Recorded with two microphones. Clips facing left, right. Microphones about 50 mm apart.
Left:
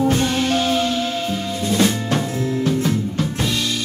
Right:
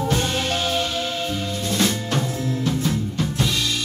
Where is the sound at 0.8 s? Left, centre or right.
Centre.